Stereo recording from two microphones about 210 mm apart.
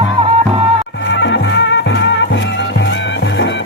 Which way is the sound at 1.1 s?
60° left (ahead or behind).